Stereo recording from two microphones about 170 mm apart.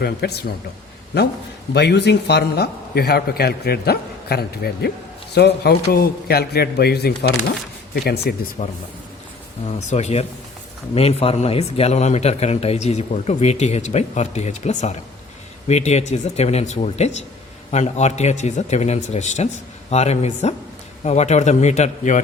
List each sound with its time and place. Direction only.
0.0 s a man's voice: 70° left (ahead or behind)
1.7 s a man's voice: 80° left
8.6 s a man's voice: 50° left (ahead or behind)